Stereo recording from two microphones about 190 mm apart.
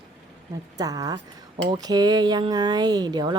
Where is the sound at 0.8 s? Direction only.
20° right (ahead or behind).